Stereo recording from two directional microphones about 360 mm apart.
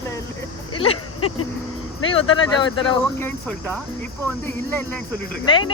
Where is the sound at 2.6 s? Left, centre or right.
Centre.